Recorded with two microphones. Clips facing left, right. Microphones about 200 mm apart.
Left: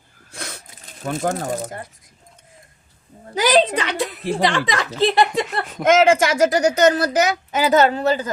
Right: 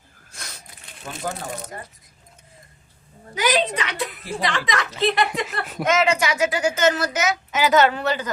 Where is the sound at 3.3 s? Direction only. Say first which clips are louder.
Left 5 dB; 35° left (ahead or behind).